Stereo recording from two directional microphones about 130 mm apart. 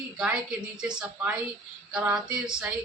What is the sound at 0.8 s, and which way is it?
Speech, 5° right (ahead or behind).